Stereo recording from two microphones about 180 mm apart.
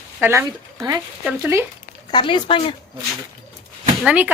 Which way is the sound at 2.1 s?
25° left (ahead or behind).